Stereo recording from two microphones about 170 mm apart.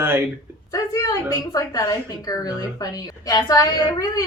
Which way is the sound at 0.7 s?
20° left (ahead or behind).